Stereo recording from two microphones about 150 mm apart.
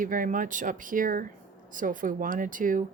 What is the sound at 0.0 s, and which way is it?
Speech, 65° right (ahead or behind).